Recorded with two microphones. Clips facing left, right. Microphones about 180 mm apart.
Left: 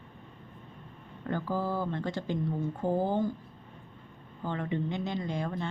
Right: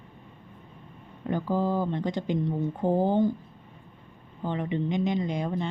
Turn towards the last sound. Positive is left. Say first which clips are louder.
# right 5 dB
turn(degrees=-20)  # may be behind; listen again after turning